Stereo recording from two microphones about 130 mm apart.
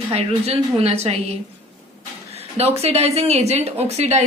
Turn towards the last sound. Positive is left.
turn(degrees=-55)  # may be behind; listen again after turning